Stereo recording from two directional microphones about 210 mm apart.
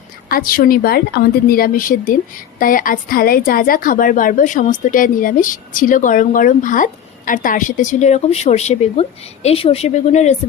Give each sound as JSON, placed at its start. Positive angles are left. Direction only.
{"t": 0.3, "sound": "speech", "side_deg": 45}